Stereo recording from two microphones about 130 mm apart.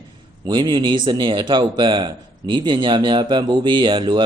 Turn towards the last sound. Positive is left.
turn(degrees=-40)  # may be behind; listen again after turning